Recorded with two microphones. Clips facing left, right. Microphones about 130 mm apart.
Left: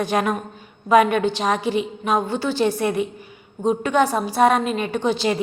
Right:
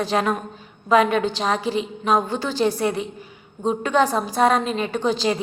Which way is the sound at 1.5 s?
35° right (ahead or behind).